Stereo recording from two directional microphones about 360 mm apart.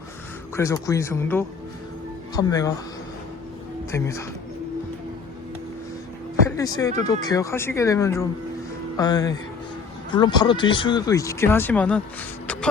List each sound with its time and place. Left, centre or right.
0.5 s speech: centre
3.9 s speech: centre
6.4 s speech: centre